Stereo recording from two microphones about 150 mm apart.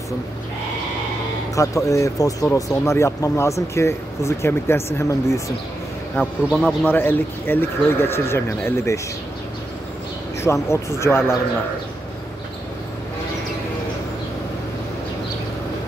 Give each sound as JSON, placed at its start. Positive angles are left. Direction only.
{"t": 1.5, "sound": "speech", "side_deg": 20}
{"t": 6.1, "sound": "speech", "side_deg": 0}
{"t": 6.9, "sound": "a man's voice", "side_deg": 15}
{"t": 10.4, "sound": "a man's voice", "side_deg": 20}